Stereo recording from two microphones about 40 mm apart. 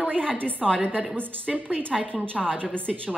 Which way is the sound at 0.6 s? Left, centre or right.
Centre.